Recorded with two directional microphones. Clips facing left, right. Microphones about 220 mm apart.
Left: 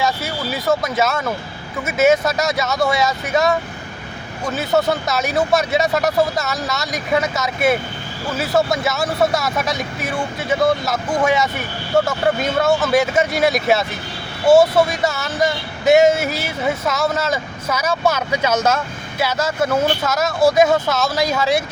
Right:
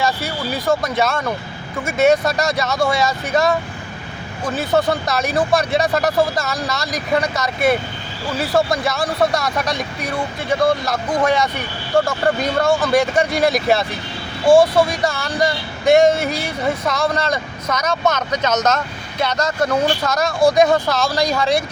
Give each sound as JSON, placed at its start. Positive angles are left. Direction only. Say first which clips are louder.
{"t": 0.0, "sound": "speech", "louder": "even", "side_deg": 0}